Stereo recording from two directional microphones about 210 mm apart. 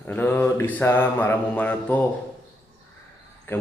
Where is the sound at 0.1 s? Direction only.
10° left (ahead or behind).